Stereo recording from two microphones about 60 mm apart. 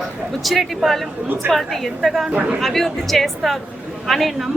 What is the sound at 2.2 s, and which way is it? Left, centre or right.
Speech, right.